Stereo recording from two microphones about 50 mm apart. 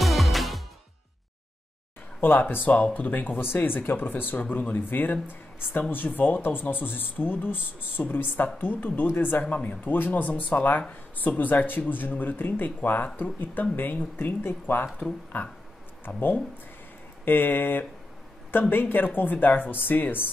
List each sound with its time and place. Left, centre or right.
0.0 s music: centre
2.2 s speech: left